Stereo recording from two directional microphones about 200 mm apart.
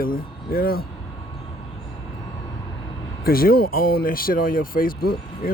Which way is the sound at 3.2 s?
50° left (ahead or behind).